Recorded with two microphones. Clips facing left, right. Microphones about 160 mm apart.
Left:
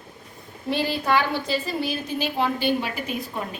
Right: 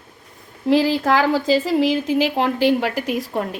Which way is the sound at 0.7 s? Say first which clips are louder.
Right 6 dB; 90° right.